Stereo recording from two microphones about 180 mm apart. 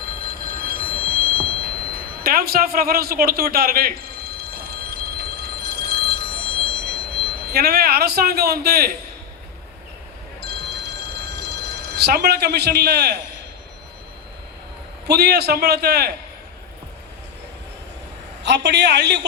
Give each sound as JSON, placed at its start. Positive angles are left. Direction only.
{"t": 0.1, "sound": "telephone bell ringing", "side_deg": -55}
{"t": 2.2, "sound": "a sound", "side_deg": -55}
{"t": 7.4, "sound": "a man's voice", "side_deg": -60}
{"t": 10.4, "sound": "telephone bell ringing", "side_deg": -65}
{"t": 15.0, "sound": "a man's voice", "side_deg": -65}
{"t": 18.4, "sound": "a man's voice", "side_deg": -75}